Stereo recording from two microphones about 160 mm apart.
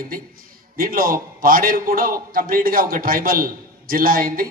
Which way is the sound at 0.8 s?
65° right (ahead or behind).